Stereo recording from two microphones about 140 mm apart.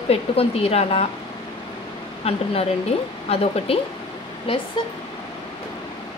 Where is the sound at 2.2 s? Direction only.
45° left (ahead or behind).